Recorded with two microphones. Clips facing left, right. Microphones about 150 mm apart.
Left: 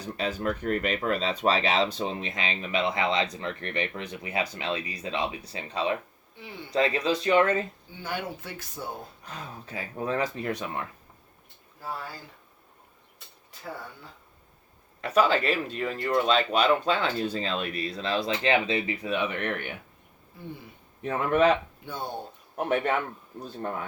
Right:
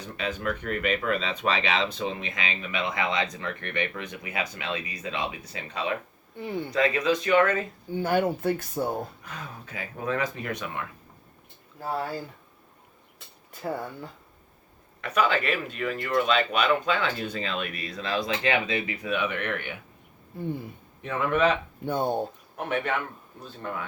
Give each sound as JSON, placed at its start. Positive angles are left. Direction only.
{"t": 0.0, "sound": "speech", "side_deg": 35}
{"t": 6.3, "sound": "speech", "side_deg": -50}
{"t": 6.7, "sound": "speech", "side_deg": 30}
{"t": 7.9, "sound": "speech", "side_deg": -50}
{"t": 9.2, "sound": "speech", "side_deg": 35}
{"t": 15.0, "sound": "speech", "side_deg": 35}
{"t": 21.0, "sound": "speech", "side_deg": 40}
{"t": 21.8, "sound": "speech", "side_deg": -55}
{"t": 22.5, "sound": "speech", "side_deg": 40}